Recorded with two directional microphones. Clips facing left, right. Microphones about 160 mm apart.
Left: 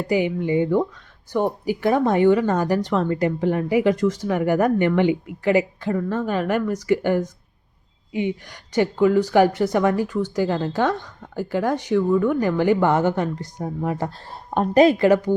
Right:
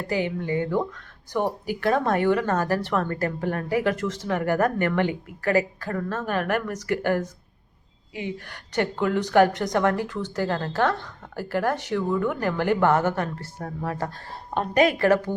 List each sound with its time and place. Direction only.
0.1 s speech: 15° left (ahead or behind)
8.4 s speech: 10° left (ahead or behind)
14.7 s a woman's voice: 30° left (ahead or behind)
14.9 s speech: 15° left (ahead or behind)